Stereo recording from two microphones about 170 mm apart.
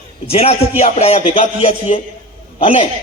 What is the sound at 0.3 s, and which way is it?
A man's voice, 35° left (ahead or behind).